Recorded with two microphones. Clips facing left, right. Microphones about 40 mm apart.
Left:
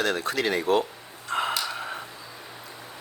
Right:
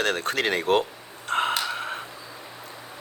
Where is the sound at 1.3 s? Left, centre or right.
Right.